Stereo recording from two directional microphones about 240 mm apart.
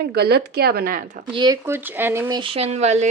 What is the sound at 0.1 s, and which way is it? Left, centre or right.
Speech, right.